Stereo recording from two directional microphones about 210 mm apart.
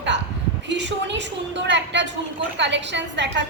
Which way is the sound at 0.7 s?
55° right (ahead or behind).